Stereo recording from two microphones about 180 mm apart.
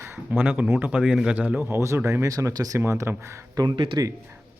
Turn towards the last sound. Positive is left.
turn(degrees=-20)  # may be behind; listen again after turning